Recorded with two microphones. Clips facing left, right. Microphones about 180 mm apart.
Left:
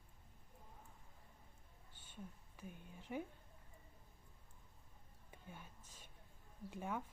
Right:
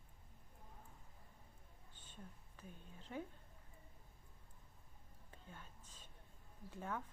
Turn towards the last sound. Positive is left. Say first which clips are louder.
# left 2 dB
turn(degrees=10)  # may be behind; listen again after turning